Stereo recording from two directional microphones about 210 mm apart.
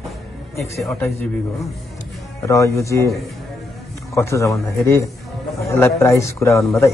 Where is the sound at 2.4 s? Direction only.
15° left (ahead or behind).